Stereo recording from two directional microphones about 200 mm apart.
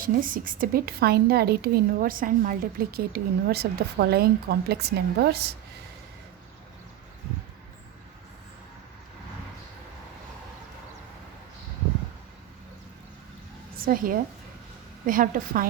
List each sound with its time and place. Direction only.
0.0 s a woman's voice: 45° right (ahead or behind)
13.7 s a woman's voice: 45° right (ahead or behind)